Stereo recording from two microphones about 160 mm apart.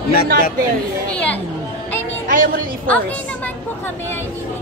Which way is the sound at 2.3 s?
60° right (ahead or behind).